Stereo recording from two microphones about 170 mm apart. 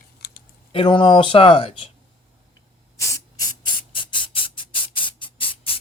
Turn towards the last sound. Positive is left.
turn(degrees=30)  # may be behind; listen again after turning